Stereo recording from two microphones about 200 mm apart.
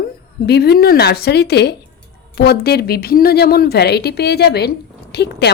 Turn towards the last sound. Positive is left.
turn(degrees=55)  # may be behind; listen again after turning